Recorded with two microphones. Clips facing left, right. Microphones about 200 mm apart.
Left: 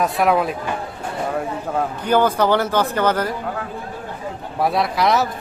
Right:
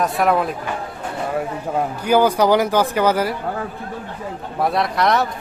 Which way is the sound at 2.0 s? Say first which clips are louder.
Right 2 dB; 10° right (ahead or behind).